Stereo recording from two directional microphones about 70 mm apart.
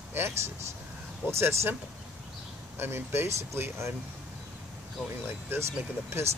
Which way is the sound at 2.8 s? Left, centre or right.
Right.